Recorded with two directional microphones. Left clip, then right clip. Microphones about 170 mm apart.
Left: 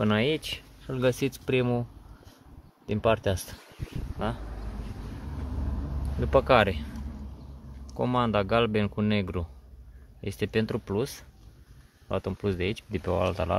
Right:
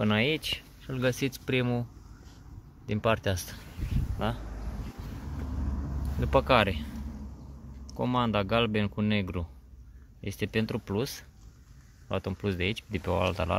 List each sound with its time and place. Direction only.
0.0 s speech: 15° left (ahead or behind)
2.9 s speech: 10° left (ahead or behind)
4.2 s speech: centre (ahead or behind)
6.1 s speech: 10° left (ahead or behind)
6.4 s speech: 30° left (ahead or behind)
10.9 s speech: 5° left (ahead or behind)